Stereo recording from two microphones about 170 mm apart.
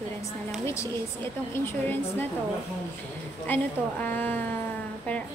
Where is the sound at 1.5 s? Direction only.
15° left (ahead or behind).